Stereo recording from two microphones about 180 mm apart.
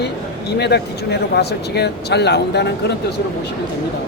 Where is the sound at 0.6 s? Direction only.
65° left (ahead or behind).